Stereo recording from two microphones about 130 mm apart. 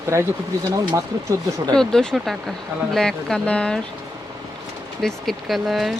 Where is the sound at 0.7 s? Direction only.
25° right (ahead or behind).